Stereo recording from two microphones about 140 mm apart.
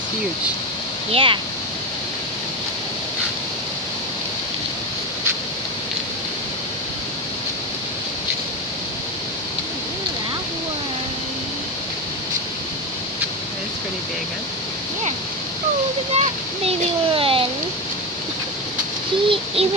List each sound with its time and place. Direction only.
1.1 s speech: 35° right (ahead or behind)
16.2 s splash: 45° right (ahead or behind)
19.2 s a sound: 45° right (ahead or behind)